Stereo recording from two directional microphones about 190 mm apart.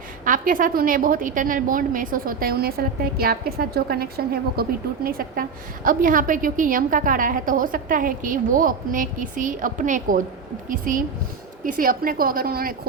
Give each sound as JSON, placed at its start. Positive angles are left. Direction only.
{"t": 0.3, "sound": "a woman's voice", "side_deg": -45}